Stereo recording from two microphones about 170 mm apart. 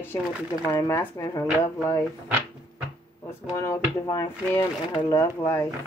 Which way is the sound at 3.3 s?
15° left (ahead or behind).